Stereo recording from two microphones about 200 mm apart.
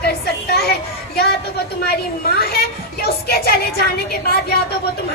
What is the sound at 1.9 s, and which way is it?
Speech, 55° left (ahead or behind).